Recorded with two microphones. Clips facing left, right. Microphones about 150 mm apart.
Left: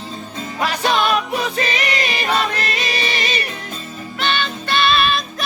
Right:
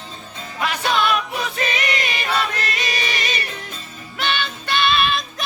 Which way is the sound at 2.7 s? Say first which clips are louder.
Left 3 dB; 30° left (ahead or behind).